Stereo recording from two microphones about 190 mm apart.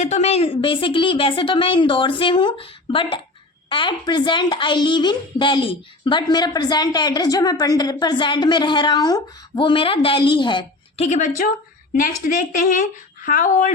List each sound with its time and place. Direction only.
0.0 s a woman's voice: 35° left (ahead or behind)